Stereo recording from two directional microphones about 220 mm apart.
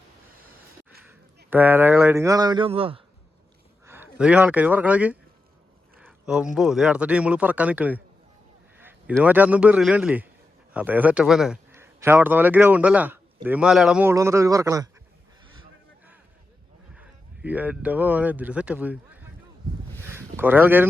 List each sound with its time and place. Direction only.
1.5 s a man's voice: 10° right (ahead or behind); by 3.0 s 25° right (ahead or behind)
3.8 s speech: 10° right (ahead or behind)
8.8 s a sound: 10° right (ahead or behind)
9.2 s a man's voice: 5° right (ahead or behind)
16.9 s speech: 5° right (ahead or behind)
20.1 s a sound: 10° right (ahead or behind)